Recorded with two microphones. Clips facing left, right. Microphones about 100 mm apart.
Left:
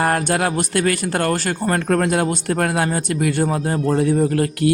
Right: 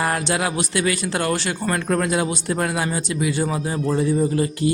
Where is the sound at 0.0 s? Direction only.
50° left (ahead or behind).